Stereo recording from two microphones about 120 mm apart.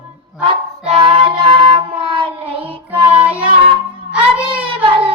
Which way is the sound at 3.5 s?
45° right (ahead or behind).